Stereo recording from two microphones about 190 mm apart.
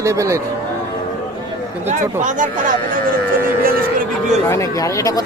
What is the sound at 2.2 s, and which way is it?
Speech, 40° right (ahead or behind).